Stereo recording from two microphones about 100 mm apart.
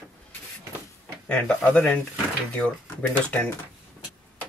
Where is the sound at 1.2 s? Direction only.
10° left (ahead or behind).